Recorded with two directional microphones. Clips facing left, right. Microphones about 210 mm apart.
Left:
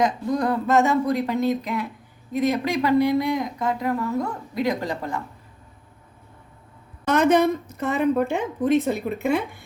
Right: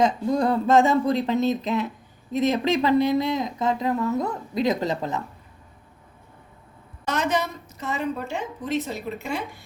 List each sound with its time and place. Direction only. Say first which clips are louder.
0.0 s a woman's voice: right 1 dB; 25° right (ahead or behind)
7.0 s a woman's voice: left 7 dB; 55° left (ahead or behind)